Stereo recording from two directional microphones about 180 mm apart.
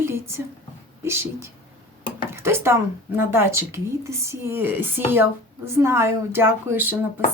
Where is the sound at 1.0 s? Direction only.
15° right (ahead or behind).